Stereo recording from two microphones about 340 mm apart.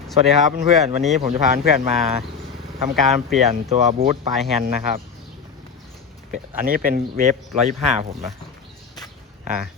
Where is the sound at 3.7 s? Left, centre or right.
Right.